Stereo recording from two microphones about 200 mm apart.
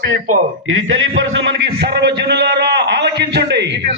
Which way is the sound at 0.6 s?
75° right (ahead or behind).